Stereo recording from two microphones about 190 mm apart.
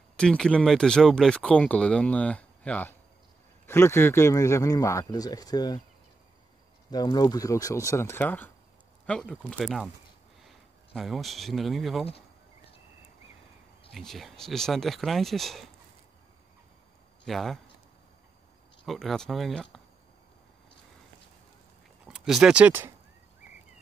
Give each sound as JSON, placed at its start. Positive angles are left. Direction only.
{"t": 0.2, "sound": "speech", "side_deg": 5}
{"t": 6.9, "sound": "speech", "side_deg": 20}
{"t": 11.0, "sound": "speech", "side_deg": 0}
{"t": 13.9, "sound": "speech", "side_deg": 0}
{"t": 17.2, "sound": "speech", "side_deg": 0}
{"t": 18.9, "sound": "speech", "side_deg": 0}
{"t": 22.0, "sound": "speech", "side_deg": -5}